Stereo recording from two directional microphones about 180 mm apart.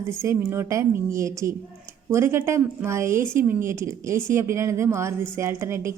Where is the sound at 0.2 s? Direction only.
15° right (ahead or behind).